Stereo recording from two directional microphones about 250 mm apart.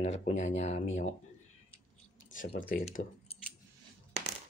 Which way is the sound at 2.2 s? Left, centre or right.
Left.